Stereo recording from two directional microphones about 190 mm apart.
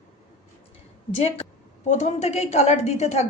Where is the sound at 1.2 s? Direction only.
30° left (ahead or behind).